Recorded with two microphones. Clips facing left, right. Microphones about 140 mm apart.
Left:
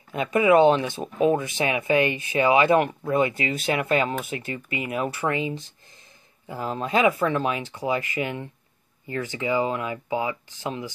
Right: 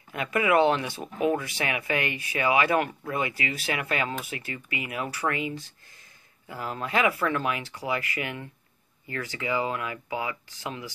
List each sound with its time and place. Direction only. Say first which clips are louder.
0.1 s speech: left 5 dB; 25° left (ahead or behind)